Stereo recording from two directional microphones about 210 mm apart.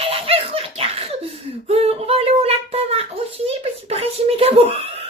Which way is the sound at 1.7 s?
30° right (ahead or behind).